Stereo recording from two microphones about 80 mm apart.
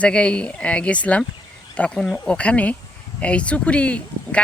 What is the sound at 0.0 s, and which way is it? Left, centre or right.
Speech, centre.